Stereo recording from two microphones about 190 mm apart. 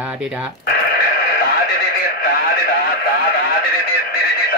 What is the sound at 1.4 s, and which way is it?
Neigh, 55° left (ahead or behind).